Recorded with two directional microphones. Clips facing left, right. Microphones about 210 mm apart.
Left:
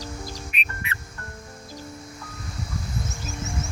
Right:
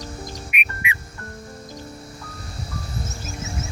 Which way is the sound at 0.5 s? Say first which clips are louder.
Right 3 dB; 10° right (ahead or behind).